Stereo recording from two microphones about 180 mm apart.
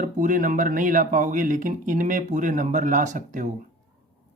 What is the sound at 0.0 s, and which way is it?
Speech, 45° right (ahead or behind).